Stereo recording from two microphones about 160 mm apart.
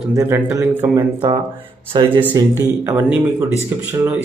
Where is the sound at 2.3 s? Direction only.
20° right (ahead or behind).